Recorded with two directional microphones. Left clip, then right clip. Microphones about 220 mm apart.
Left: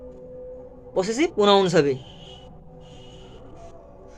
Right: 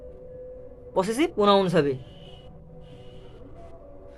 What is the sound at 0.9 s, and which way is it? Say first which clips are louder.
Speech: left 2 dB; centre (ahead or behind).